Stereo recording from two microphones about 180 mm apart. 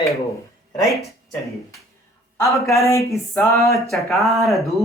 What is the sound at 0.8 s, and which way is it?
Speech, 15° left (ahead or behind).